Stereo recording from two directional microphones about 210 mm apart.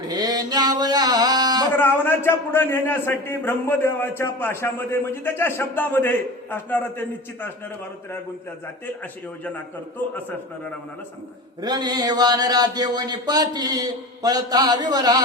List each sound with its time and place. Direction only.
0.1 s a sound: 20° right (ahead or behind)
1.7 s a man's voice: 10° left (ahead or behind)
11.6 s speech: 20° right (ahead or behind)